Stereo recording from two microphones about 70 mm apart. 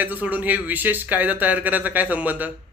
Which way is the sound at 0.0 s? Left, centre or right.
Right.